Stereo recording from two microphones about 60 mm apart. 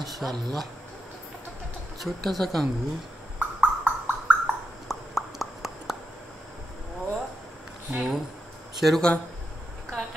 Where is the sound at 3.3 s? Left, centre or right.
Right.